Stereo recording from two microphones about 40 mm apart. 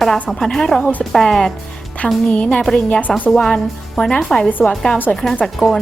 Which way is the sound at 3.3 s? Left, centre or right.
Centre.